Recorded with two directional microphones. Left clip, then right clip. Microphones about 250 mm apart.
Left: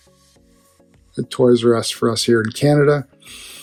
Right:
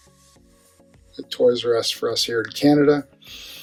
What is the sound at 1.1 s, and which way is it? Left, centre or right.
Speech, left.